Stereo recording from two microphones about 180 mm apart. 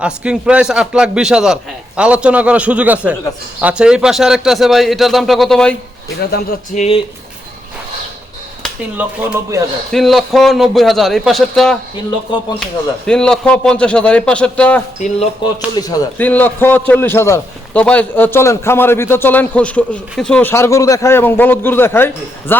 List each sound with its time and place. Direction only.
0.0 s a man's voice: 5° right (ahead or behind)
6.7 s speech: 35° left (ahead or behind)
9.0 s a man's voice: 15° right (ahead or behind)
9.9 s a man's voice: centre (ahead or behind)
13.1 s a man's voice: 5° left (ahead or behind)
14.9 s speech: 40° left (ahead or behind)
15.7 s speech: 20° left (ahead or behind)
16.1 s a man's voice: 10° left (ahead or behind)